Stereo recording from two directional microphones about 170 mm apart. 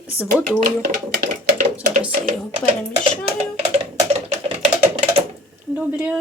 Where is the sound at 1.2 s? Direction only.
50° right (ahead or behind).